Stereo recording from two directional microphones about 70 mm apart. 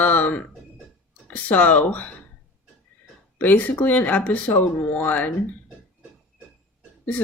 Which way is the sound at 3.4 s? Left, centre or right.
Left.